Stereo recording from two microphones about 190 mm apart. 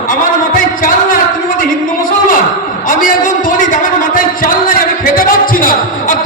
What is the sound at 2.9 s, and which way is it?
A man's voice, 45° left (ahead or behind).